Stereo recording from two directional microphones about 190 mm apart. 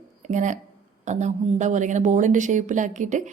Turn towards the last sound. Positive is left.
turn(degrees=-40)  # may be behind; listen again after turning